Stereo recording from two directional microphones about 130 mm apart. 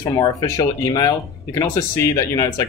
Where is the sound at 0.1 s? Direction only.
30° left (ahead or behind).